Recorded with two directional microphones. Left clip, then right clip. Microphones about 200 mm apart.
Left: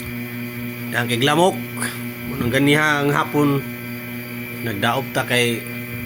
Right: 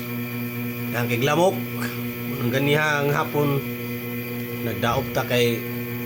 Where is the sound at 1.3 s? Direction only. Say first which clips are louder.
Left 3 dB; 20° left (ahead or behind).